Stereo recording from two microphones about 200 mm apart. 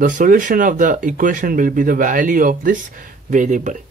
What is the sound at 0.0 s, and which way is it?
Speech, 40° right (ahead or behind).